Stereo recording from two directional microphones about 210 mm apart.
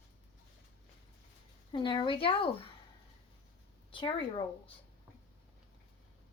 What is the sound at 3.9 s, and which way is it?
Speech, 25° left (ahead or behind).